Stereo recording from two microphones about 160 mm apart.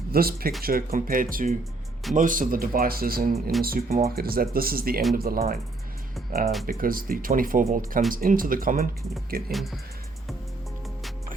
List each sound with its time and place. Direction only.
0.1 s speech: 70° right (ahead or behind)
6.7 s speech: 60° right (ahead or behind)
9.5 s speech: centre (ahead or behind)